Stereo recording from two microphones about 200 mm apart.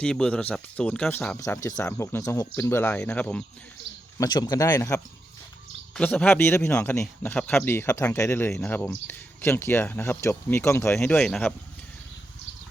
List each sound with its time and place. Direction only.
0.0 s a man's voice: 5° left (ahead or behind)
4.2 s a man's voice: 20° left (ahead or behind)
5.9 s a man's voice: 5° left (ahead or behind)